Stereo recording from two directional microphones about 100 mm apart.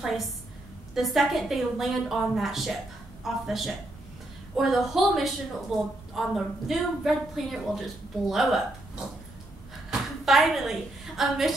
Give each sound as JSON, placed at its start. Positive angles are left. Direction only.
{"t": 0.9, "sound": "a woman's voice", "side_deg": 0}